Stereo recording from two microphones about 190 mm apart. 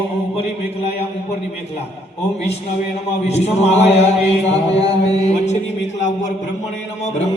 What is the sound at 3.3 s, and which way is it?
A man's voice, 35° left (ahead or behind).